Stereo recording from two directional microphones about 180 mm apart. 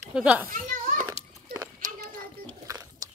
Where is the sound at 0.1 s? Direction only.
5° right (ahead or behind).